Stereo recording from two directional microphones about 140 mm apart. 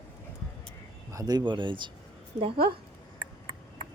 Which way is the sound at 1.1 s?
25° right (ahead or behind).